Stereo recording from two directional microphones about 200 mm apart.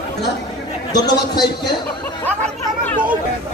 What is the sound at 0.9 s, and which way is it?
Speech, 20° left (ahead or behind).